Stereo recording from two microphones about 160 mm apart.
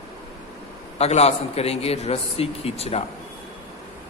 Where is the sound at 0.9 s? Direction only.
40° left (ahead or behind).